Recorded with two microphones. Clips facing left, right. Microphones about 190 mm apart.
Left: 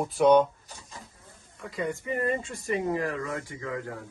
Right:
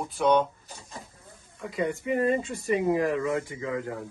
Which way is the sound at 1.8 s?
15° right (ahead or behind).